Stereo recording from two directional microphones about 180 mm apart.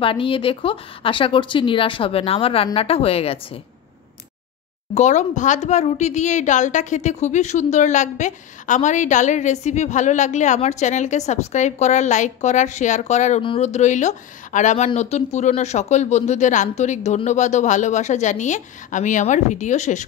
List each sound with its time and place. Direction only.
0.0 s speech: 30° left (ahead or behind)
4.9 s speech: 40° left (ahead or behind)